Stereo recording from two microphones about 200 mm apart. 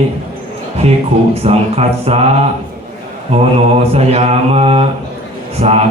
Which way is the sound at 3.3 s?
30° right (ahead or behind).